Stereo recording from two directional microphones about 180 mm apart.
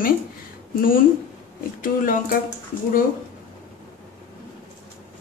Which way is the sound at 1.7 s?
50° left (ahead or behind).